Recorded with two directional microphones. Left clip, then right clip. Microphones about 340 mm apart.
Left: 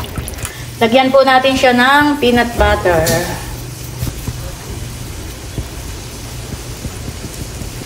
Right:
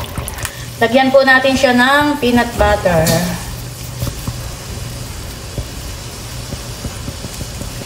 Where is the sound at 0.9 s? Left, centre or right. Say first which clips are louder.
Even; centre.